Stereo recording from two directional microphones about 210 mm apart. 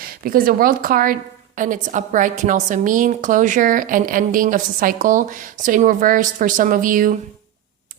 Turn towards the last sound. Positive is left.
turn(degrees=-40)  # may be behind; listen again after turning